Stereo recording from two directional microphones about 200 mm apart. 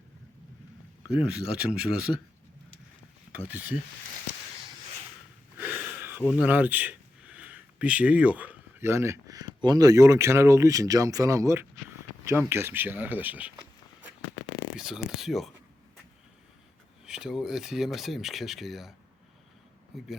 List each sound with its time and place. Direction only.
1.1 s speech: 5° right (ahead or behind)
3.3 s speech: 5° right (ahead or behind)
5.5 s speech: 10° right (ahead or behind)
17.1 s speech: 5° right (ahead or behind)